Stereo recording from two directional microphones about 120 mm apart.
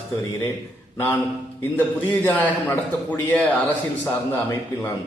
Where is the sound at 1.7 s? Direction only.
15° left (ahead or behind).